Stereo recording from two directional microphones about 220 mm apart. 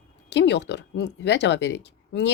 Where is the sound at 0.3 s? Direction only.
50° left (ahead or behind).